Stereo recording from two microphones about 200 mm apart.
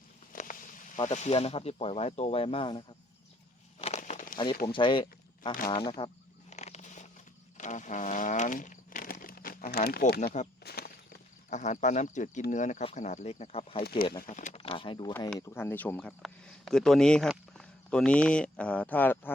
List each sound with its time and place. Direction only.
0.3 s a sound: 40° left (ahead or behind)
0.9 s speech: 35° left (ahead or behind)
3.8 s a sound: 30° left (ahead or behind)
4.6 s speech: 25° left (ahead or behind)
6.5 s a sound: 35° left (ahead or behind)
10.6 s walk: 50° left (ahead or behind)
11.5 s speech: 35° left (ahead or behind)
14.2 s speech: 40° left (ahead or behind)
15.4 s speech: 15° left (ahead or behind)